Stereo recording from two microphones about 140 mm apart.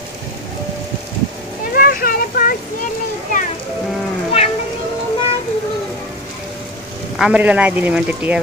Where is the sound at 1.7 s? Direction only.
90° left.